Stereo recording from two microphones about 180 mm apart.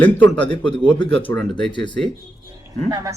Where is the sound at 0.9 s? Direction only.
25° left (ahead or behind).